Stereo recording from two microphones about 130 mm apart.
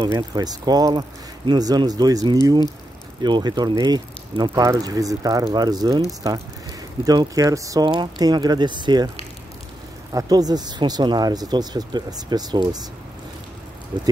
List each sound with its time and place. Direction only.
0.3 s speech: 30° right (ahead or behind)
10.1 s speech: 30° right (ahead or behind)